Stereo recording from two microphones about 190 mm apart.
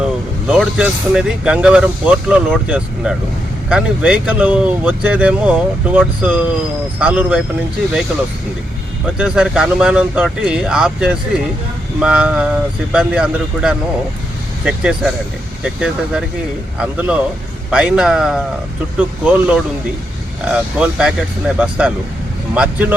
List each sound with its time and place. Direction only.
0.0 s speech: 5° right (ahead or behind)
9.1 s speech: 5° right (ahead or behind)